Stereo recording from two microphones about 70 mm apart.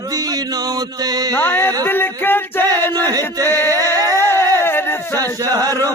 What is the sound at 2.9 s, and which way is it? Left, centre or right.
Music, right.